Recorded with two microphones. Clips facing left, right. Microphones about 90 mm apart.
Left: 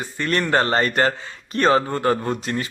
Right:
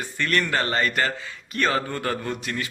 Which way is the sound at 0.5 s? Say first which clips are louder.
Left 5 dB; 35° left (ahead or behind).